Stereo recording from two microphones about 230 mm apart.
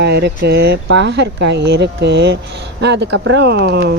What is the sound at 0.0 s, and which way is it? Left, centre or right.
Speech, right.